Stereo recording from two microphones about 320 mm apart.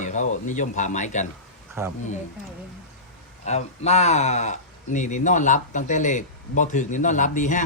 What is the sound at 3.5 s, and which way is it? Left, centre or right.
Speech, left.